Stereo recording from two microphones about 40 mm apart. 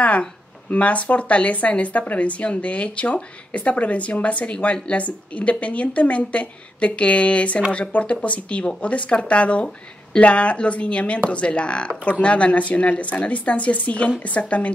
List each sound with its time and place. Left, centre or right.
0.7 s speech: left